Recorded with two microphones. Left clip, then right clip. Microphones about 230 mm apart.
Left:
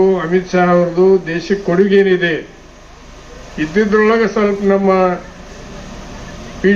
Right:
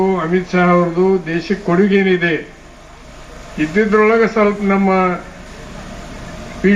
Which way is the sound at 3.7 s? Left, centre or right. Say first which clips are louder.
Even; right.